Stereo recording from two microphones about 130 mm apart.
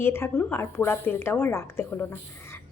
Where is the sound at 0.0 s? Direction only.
20° left (ahead or behind).